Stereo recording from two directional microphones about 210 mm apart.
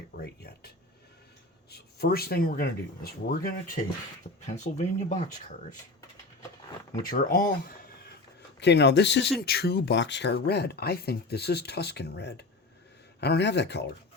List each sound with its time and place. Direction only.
0.1 s a sound: 45° left (ahead or behind)
1.7 s speech: 50° left (ahead or behind)
4.4 s speech: 35° left (ahead or behind)
7.1 s speech: 45° left (ahead or behind)